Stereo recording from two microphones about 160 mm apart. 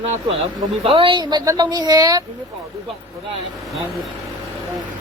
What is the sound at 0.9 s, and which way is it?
A man's voice, 30° right (ahead or behind).